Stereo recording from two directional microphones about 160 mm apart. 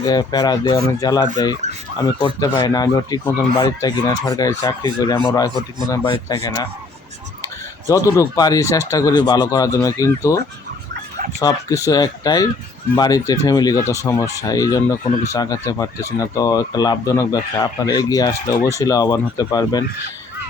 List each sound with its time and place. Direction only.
0.0 s speech: 25° left (ahead or behind)
7.9 s speech: 20° left (ahead or behind)